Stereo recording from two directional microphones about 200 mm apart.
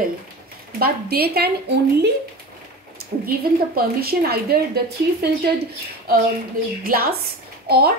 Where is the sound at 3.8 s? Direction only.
50° right (ahead or behind).